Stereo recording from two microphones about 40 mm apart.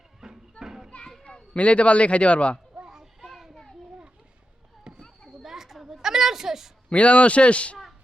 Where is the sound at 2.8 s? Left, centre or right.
Centre.